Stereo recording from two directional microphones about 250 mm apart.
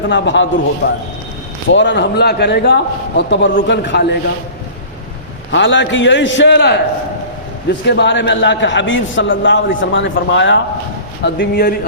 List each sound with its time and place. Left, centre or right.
0.1 s a man's voice: left
5.5 s a man's voice: left
7.9 s a man's voice: left